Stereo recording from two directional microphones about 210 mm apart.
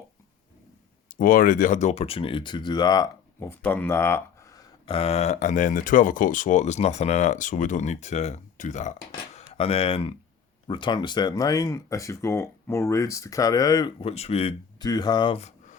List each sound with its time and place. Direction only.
1.1 s speech: 40° left (ahead or behind); by 4.6 s 10° left (ahead or behind)
4.9 s speech: 30° left (ahead or behind)